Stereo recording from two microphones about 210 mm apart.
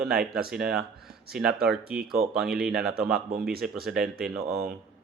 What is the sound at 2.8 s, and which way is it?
Speech, 50° right (ahead or behind).